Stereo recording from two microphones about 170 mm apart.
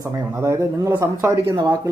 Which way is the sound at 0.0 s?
15° right (ahead or behind).